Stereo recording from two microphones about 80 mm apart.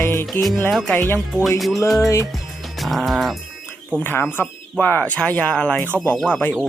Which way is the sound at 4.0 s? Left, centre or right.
Left.